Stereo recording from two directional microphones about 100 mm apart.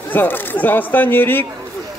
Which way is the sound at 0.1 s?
20° left (ahead or behind).